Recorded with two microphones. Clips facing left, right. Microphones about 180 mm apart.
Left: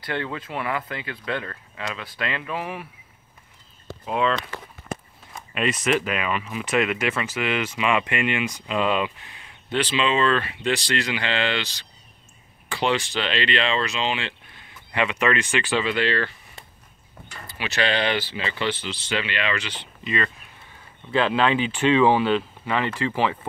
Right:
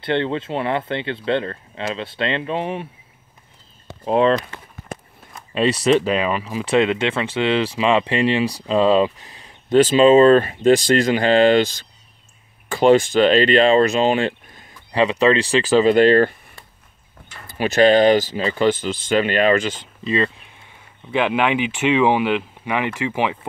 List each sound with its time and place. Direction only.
0.0 s speech: 25° right (ahead or behind)
4.0 s speech: 35° right (ahead or behind)
5.5 s speech: 30° right (ahead or behind); by 16.3 s 45° right (ahead or behind)
17.5 s speech: 45° right (ahead or behind)
21.1 s speech: 15° right (ahead or behind)